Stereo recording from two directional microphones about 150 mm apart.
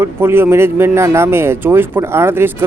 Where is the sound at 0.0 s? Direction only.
15° right (ahead or behind).